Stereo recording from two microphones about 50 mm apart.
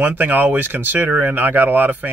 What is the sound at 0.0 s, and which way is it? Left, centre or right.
Speech, right.